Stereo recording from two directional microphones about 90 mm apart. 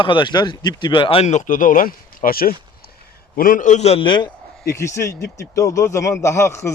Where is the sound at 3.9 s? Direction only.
65° left (ahead or behind).